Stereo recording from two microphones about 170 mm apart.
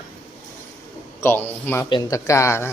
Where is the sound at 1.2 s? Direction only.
10° left (ahead or behind).